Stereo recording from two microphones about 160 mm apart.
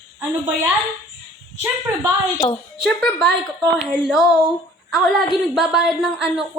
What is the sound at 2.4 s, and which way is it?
Speech, 25° left (ahead or behind).